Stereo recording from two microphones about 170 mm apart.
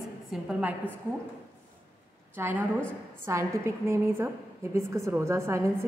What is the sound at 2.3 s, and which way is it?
A woman's voice, 10° right (ahead or behind).